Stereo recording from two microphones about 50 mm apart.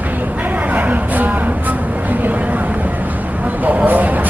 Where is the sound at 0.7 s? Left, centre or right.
Right.